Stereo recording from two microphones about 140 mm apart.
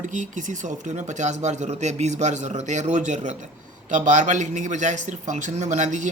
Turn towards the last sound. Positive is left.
turn(degrees=-60)  # may be behind; listen again after turning